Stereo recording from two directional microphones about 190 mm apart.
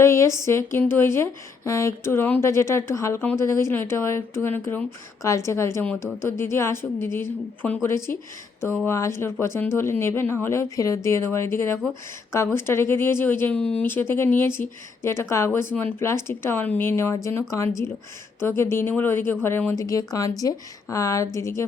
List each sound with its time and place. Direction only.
0.0 s speech: 15° left (ahead or behind)
18.4 s speech: 15° left (ahead or behind)